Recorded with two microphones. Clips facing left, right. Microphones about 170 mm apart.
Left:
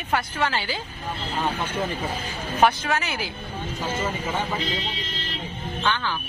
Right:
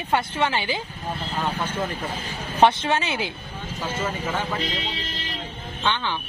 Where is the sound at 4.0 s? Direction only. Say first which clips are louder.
Right 2 dB; 10° left (ahead or behind).